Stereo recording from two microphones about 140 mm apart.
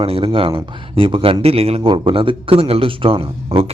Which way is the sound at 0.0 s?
40° right (ahead or behind).